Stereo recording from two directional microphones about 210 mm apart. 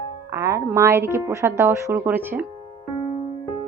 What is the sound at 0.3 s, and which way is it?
Speech, 15° right (ahead or behind).